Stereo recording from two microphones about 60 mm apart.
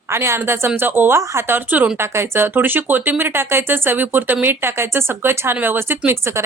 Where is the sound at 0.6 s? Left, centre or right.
Right.